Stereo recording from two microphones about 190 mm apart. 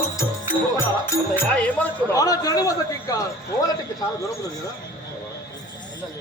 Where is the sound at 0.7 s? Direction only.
10° left (ahead or behind).